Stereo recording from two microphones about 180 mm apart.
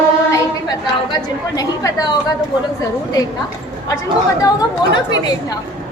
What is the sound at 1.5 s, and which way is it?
Speech, 20° left (ahead or behind).